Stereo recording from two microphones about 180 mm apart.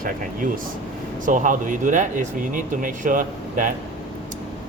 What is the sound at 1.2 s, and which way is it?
Speech, 45° right (ahead or behind).